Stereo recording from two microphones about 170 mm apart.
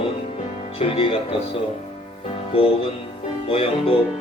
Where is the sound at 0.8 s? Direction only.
35° left (ahead or behind).